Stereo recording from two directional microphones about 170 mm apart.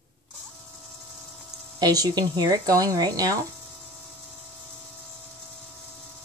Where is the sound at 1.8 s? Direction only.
20° right (ahead or behind).